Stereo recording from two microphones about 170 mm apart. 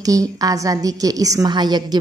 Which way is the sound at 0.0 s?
20° right (ahead or behind).